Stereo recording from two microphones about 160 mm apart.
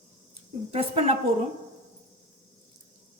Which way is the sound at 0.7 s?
40° right (ahead or behind).